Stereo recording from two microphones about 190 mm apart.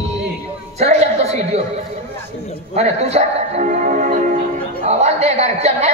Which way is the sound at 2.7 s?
35° right (ahead or behind).